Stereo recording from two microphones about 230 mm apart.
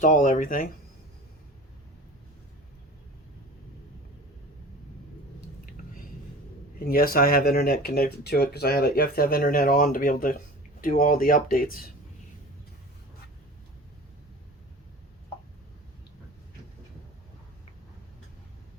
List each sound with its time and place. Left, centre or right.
0.0 s speech: left
5.6 s a sound: left
6.7 s speech: left